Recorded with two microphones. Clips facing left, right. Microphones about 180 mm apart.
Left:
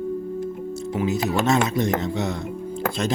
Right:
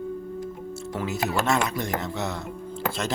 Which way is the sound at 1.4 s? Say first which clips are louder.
Left 5 dB; 20° left (ahead or behind).